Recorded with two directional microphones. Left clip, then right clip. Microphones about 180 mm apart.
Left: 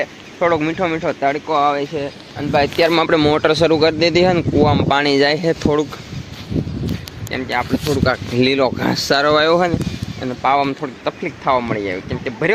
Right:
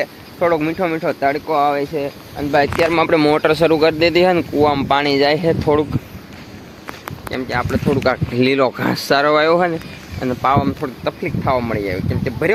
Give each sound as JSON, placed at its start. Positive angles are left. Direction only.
{"t": 0.0, "sound": "speech", "side_deg": -10}
{"t": 2.9, "sound": "speech", "side_deg": 20}
{"t": 3.2, "sound": "speech", "side_deg": 5}
{"t": 4.9, "sound": "speech", "side_deg": 15}
{"t": 7.3, "sound": "speech", "side_deg": -15}
{"t": 8.4, "sound": "speech", "side_deg": 5}
{"t": 10.2, "sound": "speech", "side_deg": -50}
{"t": 10.8, "sound": "speech", "side_deg": -20}